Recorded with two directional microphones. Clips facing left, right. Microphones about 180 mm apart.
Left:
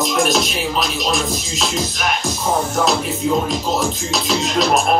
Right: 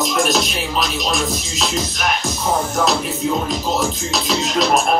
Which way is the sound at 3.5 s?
Centre (ahead or behind).